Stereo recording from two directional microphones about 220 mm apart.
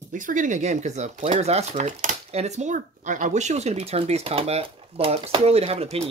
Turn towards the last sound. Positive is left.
turn(degrees=-25)  # may be behind; listen again after turning